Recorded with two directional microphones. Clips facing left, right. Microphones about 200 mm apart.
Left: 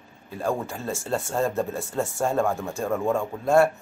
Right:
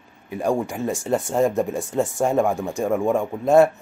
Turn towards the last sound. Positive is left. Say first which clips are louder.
# right 4 dB
turn(degrees=-20)  # may be behind; listen again after turning